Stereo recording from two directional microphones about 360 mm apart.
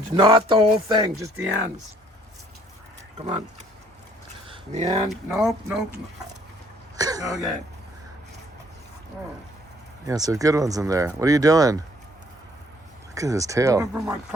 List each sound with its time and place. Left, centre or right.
0.2 s speech: centre
3.2 s speech: centre
4.4 s a sound: centre
5.0 s speech: centre
6.9 s cough: centre
10.1 s speech: centre
13.1 s speech: centre